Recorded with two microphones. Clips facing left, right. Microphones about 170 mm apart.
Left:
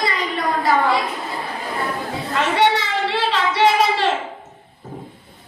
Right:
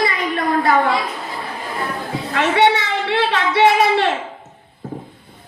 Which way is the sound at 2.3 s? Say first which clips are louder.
Right 2 dB; 65° right (ahead or behind).